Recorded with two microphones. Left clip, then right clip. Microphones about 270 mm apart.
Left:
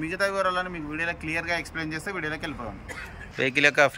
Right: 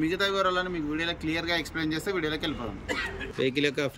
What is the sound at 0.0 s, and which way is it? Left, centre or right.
Speech, centre.